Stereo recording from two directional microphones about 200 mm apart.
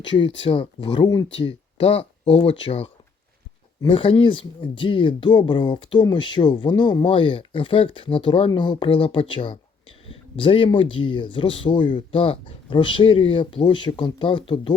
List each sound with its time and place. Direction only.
0.0 s speech: 25° left (ahead or behind)